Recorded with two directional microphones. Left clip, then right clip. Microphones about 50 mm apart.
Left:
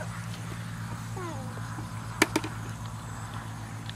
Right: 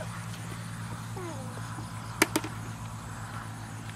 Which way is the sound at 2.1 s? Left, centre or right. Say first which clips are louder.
Left 1 dB; right.